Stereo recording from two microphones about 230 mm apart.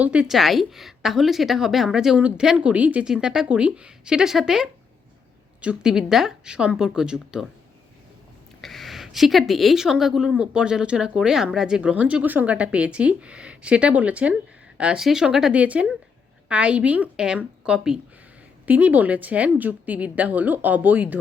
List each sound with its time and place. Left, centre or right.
0.0 s a woman's voice: centre
8.6 s a woman's voice: centre